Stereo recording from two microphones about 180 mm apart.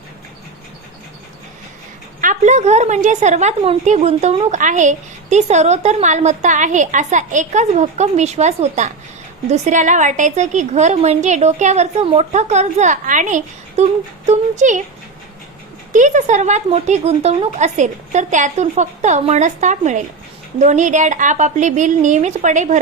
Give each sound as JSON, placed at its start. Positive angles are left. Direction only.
{"t": 2.2, "sound": "a woman's voice", "side_deg": -40}
{"t": 15.9, "sound": "a woman's voice", "side_deg": -45}